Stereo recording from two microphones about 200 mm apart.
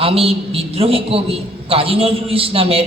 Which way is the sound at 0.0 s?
30° right (ahead or behind).